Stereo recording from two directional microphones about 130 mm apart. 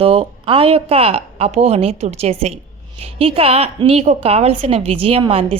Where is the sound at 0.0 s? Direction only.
45° right (ahead or behind).